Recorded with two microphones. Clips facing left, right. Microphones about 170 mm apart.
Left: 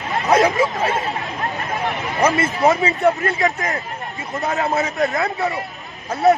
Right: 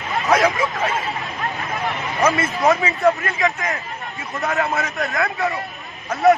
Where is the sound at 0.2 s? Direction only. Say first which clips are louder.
Left 2 dB; 20° left (ahead or behind).